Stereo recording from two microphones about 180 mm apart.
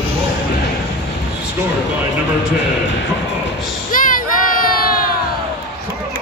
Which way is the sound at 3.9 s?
50° left (ahead or behind).